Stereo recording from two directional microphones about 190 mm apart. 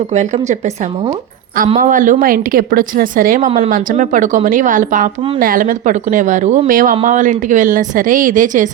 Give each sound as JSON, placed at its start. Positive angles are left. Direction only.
{"t": 0.1, "sound": "speech", "side_deg": -40}